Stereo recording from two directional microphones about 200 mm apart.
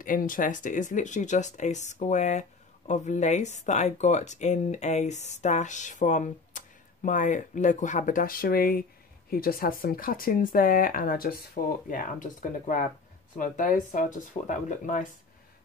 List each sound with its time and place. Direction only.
0.0 s speech: 45° left (ahead or behind)